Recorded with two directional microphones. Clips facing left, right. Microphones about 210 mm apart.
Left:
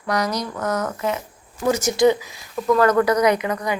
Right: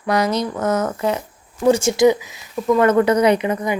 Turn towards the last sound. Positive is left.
turn(degrees=-25)  # may be behind; listen again after turning